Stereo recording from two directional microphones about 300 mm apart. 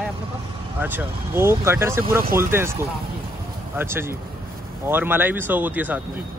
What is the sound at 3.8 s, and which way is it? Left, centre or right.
Speech, centre.